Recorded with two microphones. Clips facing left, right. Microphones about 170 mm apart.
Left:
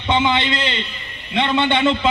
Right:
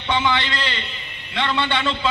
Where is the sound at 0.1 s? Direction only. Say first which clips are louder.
Left 4 dB; 20° left (ahead or behind).